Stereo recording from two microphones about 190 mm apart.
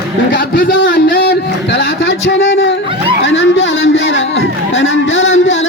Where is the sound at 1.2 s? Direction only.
65° left (ahead or behind).